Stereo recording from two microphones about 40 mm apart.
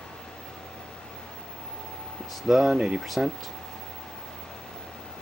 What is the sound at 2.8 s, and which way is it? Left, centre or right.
Speech, centre.